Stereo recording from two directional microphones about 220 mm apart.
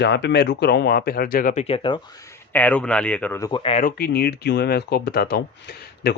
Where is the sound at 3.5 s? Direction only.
20° left (ahead or behind).